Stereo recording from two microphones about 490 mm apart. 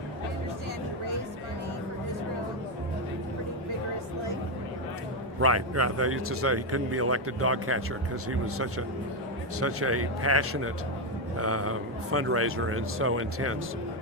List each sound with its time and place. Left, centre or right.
5.4 s speech: right